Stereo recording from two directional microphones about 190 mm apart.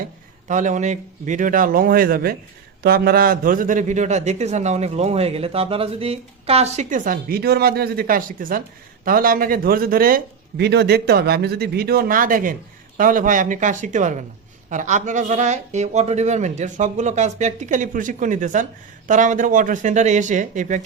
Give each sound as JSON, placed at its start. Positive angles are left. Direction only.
{"t": 0.4, "sound": "a man's voice", "side_deg": -40}
{"t": 10.6, "sound": "a man's voice", "side_deg": -60}